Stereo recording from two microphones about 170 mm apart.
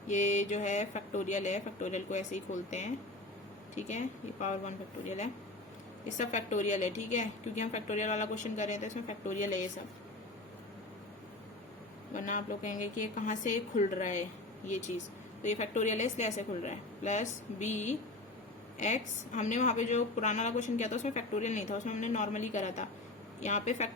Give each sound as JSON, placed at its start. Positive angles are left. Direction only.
{"t": 0.1, "sound": "a woman's voice", "side_deg": 45}
{"t": 12.1, "sound": "a woman's voice", "side_deg": 50}
{"t": 15.4, "sound": "a woman's voice", "side_deg": 45}
{"t": 19.4, "sound": "a woman's voice", "side_deg": 45}